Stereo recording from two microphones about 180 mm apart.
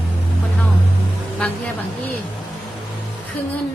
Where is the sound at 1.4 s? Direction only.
10° left (ahead or behind).